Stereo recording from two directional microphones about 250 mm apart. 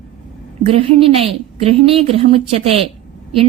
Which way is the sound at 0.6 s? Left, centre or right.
Right.